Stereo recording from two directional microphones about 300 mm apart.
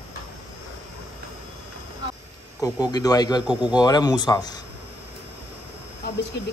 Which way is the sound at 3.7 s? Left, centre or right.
Centre.